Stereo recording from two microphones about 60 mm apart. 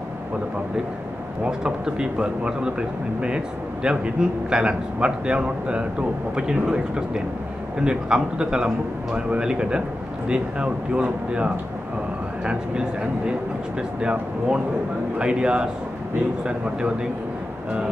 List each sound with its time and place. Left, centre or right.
1.4 s a man's voice: centre
7.8 s a man's voice: centre
15.1 s a man's voice: centre